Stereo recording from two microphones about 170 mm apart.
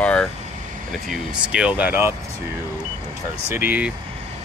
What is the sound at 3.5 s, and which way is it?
Speech, 10° right (ahead or behind).